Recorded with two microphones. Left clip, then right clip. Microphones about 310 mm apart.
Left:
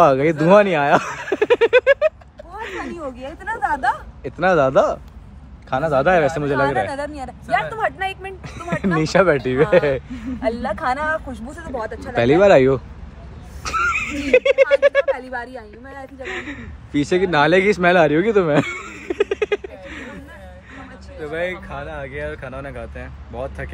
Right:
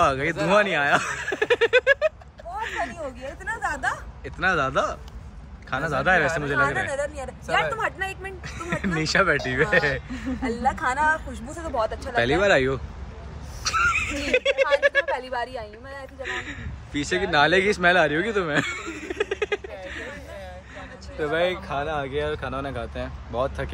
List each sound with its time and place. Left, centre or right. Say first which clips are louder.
0.0 s speech: left 8 dB; centre
0.5 s snicker: left 6 dB; centre
2.6 s a sound: even; centre
3.2 s speech: left 7 dB; centre
12.2 s speech: left 7 dB; centre
13.7 s a sound: left 2 dB; centre
14.3 s speech: left 7 dB; centre
16.2 s speech: left 2 dB; centre
21.2 s speech: right 1 dB; centre